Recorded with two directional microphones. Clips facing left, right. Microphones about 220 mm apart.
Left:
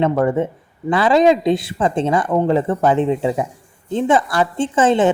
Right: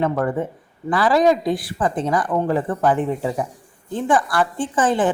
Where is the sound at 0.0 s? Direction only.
25° left (ahead or behind).